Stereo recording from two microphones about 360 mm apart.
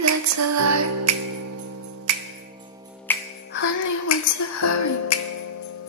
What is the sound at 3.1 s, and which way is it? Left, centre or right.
Music, centre.